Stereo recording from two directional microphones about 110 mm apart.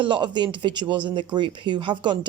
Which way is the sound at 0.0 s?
45° right (ahead or behind).